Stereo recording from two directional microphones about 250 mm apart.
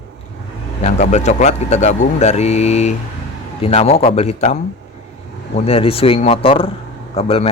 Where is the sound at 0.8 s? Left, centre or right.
Left.